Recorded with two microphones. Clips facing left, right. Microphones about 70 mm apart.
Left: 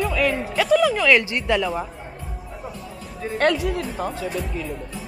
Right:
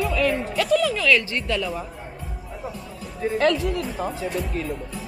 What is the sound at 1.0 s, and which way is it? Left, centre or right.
Speech, centre.